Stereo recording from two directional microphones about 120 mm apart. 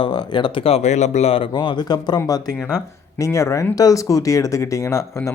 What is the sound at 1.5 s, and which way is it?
Speech, 35° left (ahead or behind).